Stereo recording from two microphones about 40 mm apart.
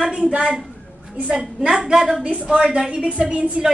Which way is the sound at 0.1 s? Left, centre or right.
Right.